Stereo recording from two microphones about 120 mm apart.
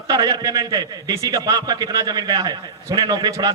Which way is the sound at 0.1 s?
30° right (ahead or behind).